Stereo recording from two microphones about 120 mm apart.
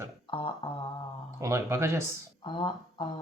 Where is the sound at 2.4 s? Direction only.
40° left (ahead or behind).